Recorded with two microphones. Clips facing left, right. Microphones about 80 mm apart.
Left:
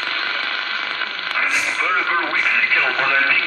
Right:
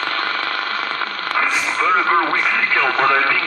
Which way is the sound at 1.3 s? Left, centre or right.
Right.